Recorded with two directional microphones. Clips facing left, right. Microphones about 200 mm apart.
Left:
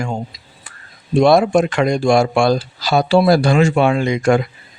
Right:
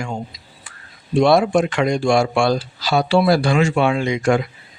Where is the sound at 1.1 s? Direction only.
45° left (ahead or behind).